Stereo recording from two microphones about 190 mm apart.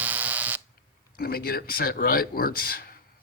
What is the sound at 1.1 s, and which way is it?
A man's voice, 50° left (ahead or behind).